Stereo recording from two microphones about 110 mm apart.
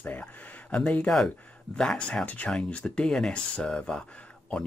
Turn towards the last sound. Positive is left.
turn(degrees=10)  # may be behind; listen again after turning